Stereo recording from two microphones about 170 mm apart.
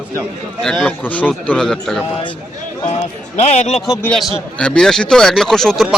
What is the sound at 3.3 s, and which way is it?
Speech, 40° left (ahead or behind).